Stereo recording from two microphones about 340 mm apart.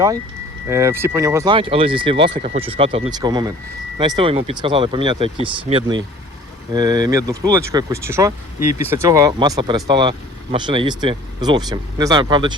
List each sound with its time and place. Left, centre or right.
0.7 s speech: centre